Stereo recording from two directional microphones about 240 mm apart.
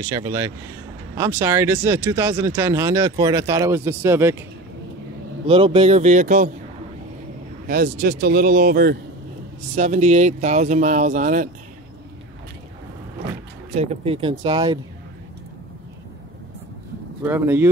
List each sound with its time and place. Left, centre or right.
0.0 s speech: centre
5.5 s speech: right
7.6 s speech: right
13.7 s speech: right
17.2 s speech: centre